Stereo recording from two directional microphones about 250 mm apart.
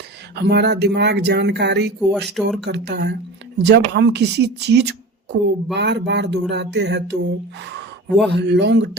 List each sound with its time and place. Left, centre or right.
0.3 s speech: right
2.0 s speech: centre
2.6 s speech: right